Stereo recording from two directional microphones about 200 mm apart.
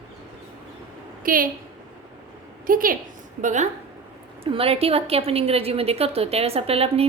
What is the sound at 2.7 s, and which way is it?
A woman's voice, 45° right (ahead or behind).